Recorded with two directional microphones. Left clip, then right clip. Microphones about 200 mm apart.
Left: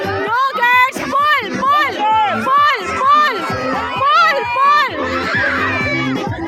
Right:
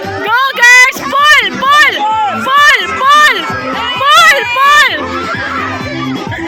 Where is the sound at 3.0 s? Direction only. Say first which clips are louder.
Right 5 dB; centre (ahead or behind).